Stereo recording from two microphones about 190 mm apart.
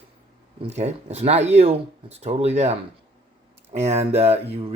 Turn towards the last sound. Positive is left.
turn(degrees=-35)  # may be behind; listen again after turning